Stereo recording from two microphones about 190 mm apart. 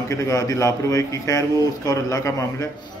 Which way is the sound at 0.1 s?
15° left (ahead or behind).